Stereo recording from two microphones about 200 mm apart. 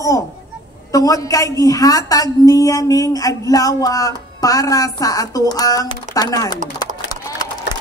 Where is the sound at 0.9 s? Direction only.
15° left (ahead or behind).